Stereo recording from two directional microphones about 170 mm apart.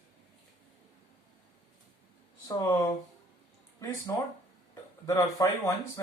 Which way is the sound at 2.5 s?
20° left (ahead or behind).